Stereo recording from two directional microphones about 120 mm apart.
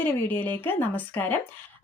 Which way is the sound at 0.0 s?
15° left (ahead or behind).